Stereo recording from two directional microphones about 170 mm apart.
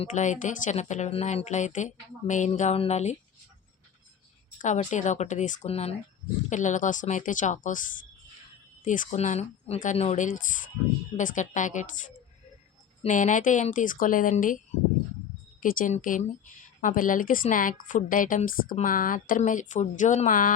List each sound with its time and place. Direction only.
0.0 s speech: 45° left (ahead or behind)
4.5 s speech: 45° left (ahead or behind)
8.8 s speech: 50° left (ahead or behind)
13.0 s speech: 45° left (ahead or behind)
15.6 s speech: 55° left (ahead or behind)